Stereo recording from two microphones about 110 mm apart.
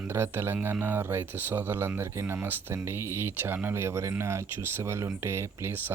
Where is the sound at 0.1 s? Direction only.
20° right (ahead or behind).